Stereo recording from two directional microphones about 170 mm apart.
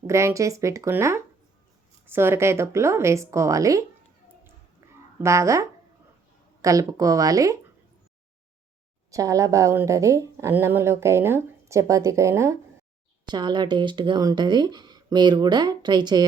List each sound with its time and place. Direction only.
0.1 s a woman's voice: 15° right (ahead or behind)
5.2 s a woman's voice: 15° right (ahead or behind)
9.0 s a woman's voice: 20° right (ahead or behind)